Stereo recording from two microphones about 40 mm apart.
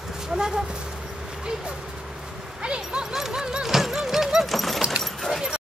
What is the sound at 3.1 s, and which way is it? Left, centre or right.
Music, centre.